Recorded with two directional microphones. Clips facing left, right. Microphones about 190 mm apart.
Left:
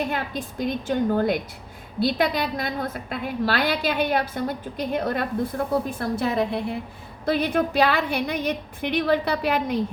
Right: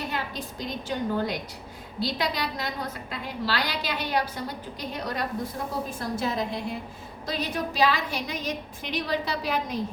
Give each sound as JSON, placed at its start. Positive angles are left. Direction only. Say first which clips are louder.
{"t": 0.1, "sound": "a woman's voice", "louder": "left 4 dB", "side_deg": 55}